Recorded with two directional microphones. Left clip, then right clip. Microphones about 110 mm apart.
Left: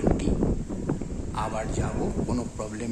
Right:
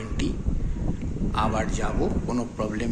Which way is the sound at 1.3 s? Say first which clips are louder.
Right 4 dB; 20° left (ahead or behind).